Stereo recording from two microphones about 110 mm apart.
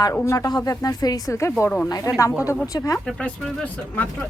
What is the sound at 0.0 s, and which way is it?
A woman's voice, 30° left (ahead or behind).